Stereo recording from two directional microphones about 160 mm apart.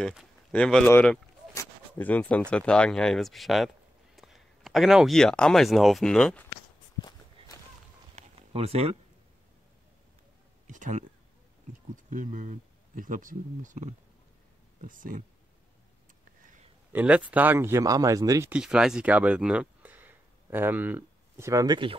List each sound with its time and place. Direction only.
0.0 s speech: centre (ahead or behind)
1.5 s a sound: 15° left (ahead or behind)
2.5 s speech: 5° left (ahead or behind)
7.0 s walk: 25° left (ahead or behind)
8.2 s a sound: 40° right (ahead or behind)
10.7 s a sound: 50° right (ahead or behind)
11.9 s speech: 55° right (ahead or behind)
16.9 s speech: 10° right (ahead or behind)
18.5 s speech: 5° right (ahead or behind); by 21.9 s 30° right (ahead or behind)